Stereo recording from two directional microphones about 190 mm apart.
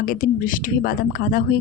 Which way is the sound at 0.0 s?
50° left (ahead or behind).